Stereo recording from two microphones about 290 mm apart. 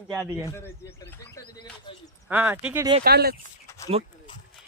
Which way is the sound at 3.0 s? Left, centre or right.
Right.